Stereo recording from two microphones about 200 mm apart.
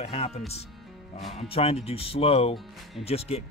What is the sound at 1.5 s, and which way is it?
Speech, 30° left (ahead or behind).